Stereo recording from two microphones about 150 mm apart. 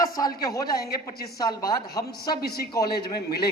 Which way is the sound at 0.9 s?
90° left.